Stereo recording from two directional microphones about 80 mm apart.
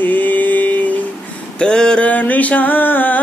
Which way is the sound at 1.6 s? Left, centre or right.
Centre.